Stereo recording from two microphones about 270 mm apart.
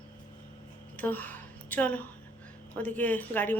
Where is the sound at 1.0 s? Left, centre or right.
Centre.